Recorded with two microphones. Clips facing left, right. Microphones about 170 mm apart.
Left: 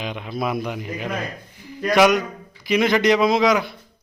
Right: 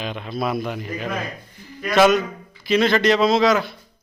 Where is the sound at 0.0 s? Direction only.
15° left (ahead or behind).